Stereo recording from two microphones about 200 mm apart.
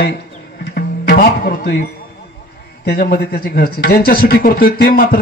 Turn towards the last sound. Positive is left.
turn(degrees=45)  # may be behind; listen again after turning